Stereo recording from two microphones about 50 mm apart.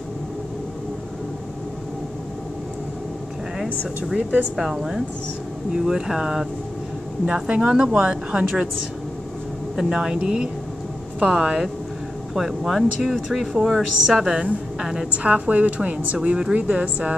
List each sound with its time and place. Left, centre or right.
4.0 s a woman's voice: centre
7.4 s a woman's voice: right
9.8 s a woman's voice: centre
14.2 s a woman's voice: centre
15.0 s a woman's voice: right